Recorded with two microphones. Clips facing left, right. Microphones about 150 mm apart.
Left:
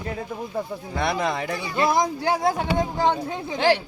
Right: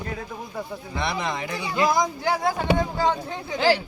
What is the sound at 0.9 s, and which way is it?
Speech, 45° left (ahead or behind).